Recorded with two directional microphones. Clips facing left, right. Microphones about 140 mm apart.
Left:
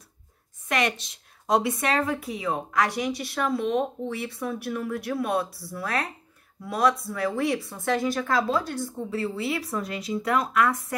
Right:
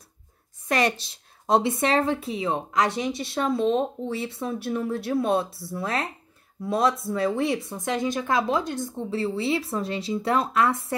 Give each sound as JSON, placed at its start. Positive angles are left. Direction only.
{"t": 0.7, "sound": "a woman's voice", "side_deg": -35}